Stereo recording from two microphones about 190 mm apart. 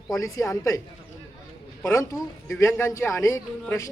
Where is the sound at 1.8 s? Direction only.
15° left (ahead or behind).